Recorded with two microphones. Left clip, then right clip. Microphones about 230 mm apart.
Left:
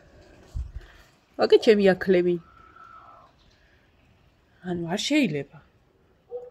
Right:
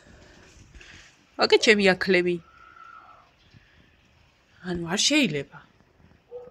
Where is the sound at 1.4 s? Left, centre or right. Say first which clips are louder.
Left 1 dB; centre.